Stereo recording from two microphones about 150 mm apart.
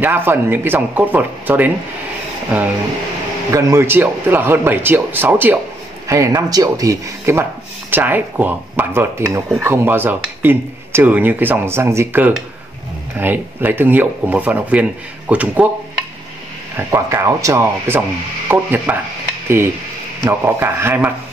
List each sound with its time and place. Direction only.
0.0 s speech: 15° right (ahead or behind)
3.5 s speech: 20° right (ahead or behind)
16.7 s speech: 20° right (ahead or behind)
20.2 s speech: 15° right (ahead or behind)